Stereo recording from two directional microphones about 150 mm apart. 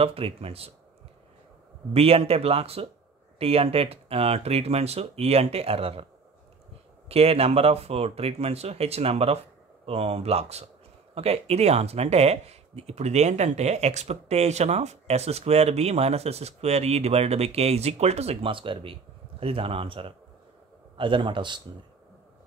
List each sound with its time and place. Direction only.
0.0 s speech: 40° right (ahead or behind)
2.0 s speech: 40° right (ahead or behind)
7.1 s speech: 40° right (ahead or behind)